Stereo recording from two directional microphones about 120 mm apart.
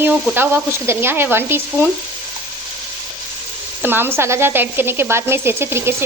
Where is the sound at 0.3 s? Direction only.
20° right (ahead or behind).